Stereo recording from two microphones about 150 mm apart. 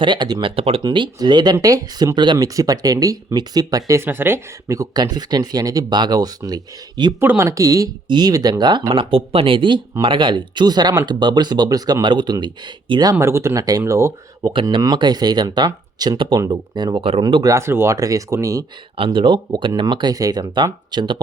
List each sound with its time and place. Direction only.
0.0 s speech: 30° right (ahead or behind)
0.5 s speech: 40° right (ahead or behind)
7.2 s speech: 15° right (ahead or behind)
14.5 s speech: 30° right (ahead or behind)
18.9 s speech: 35° right (ahead or behind)